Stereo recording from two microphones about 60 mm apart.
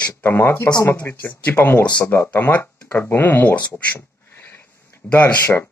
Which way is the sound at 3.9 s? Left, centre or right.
Left.